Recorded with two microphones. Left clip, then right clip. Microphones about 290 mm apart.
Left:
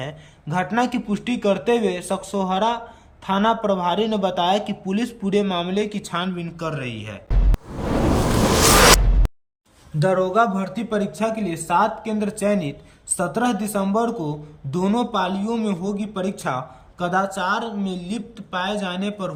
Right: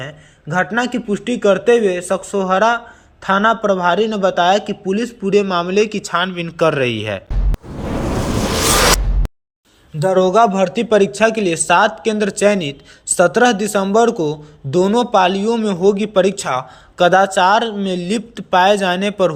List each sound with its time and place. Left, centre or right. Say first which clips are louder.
0.0 s a man's voice: right 2 dB; centre
7.5 s zipper: even; centre
10.0 s a man's voice: right 6 dB; centre
10.5 s a man's voice: right 11 dB; centre